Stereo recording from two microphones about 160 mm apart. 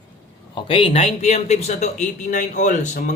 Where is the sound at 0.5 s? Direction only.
35° left (ahead or behind).